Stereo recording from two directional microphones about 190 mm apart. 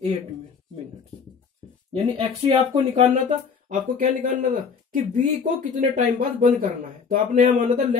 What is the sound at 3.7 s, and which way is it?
Speech, 45° right (ahead or behind).